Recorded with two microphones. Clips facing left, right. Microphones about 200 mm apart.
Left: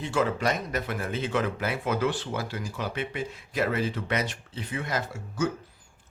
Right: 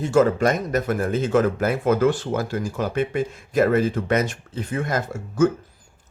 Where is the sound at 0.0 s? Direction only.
45° right (ahead or behind).